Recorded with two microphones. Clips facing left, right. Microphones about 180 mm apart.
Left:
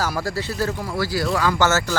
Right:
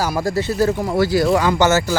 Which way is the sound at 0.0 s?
15° right (ahead or behind).